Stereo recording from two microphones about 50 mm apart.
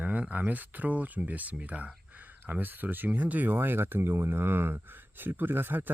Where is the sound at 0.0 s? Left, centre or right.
Right.